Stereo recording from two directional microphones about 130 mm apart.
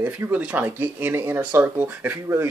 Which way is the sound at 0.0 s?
10° right (ahead or behind).